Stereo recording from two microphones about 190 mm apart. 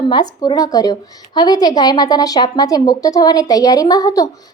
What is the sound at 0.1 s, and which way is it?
A woman's voice, 25° left (ahead or behind).